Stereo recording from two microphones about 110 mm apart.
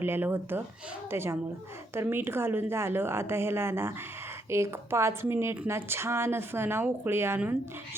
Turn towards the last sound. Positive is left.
turn(degrees=-20)  # may be behind; listen again after turning